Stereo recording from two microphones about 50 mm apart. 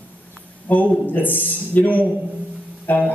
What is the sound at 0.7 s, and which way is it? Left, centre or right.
A man's voice, left.